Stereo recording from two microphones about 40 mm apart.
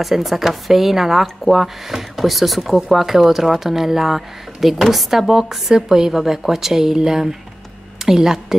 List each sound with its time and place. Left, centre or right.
0.0 s speech: centre